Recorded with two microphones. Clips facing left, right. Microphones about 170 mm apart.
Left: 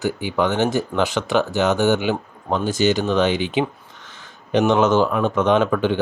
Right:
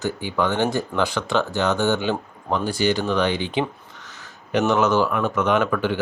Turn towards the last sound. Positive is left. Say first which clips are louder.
# left 3 dB
turn(degrees=25)  # may be behind; listen again after turning